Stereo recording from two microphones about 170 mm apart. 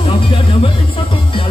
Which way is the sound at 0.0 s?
35° left (ahead or behind).